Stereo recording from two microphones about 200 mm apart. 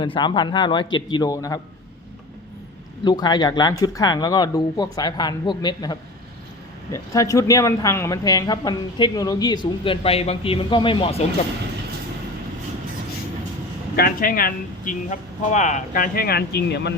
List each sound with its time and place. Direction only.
0.0 s speech: 25° left (ahead or behind)
3.0 s speech: 20° left (ahead or behind)
13.9 s speech: 45° left (ahead or behind)